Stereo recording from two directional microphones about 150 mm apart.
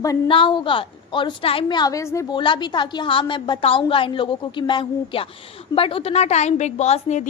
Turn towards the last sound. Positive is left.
turn(degrees=45)  # may be behind; listen again after turning